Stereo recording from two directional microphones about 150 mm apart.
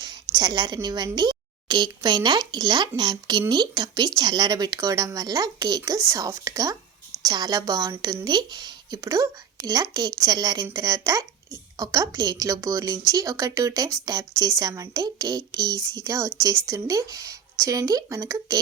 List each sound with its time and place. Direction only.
0.3 s a woman's voice: 30° right (ahead or behind)